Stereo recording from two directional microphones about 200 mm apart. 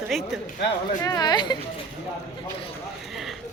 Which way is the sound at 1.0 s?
20° left (ahead or behind).